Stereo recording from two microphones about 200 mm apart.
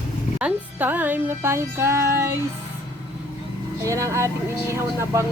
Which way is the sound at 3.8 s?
15° right (ahead or behind).